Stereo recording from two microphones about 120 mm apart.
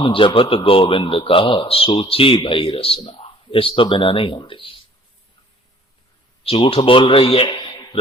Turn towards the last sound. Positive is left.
turn(degrees=45)  # may be behind; listen again after turning